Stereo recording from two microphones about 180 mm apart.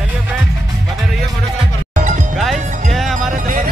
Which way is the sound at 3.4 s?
50° right (ahead or behind).